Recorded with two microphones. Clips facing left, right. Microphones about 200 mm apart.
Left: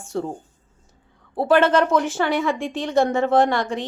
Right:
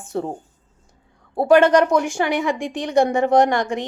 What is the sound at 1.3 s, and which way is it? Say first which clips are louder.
Speech: right 3 dB; 15° right (ahead or behind).